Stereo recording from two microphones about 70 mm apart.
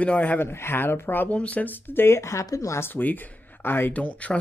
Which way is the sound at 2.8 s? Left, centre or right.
Left.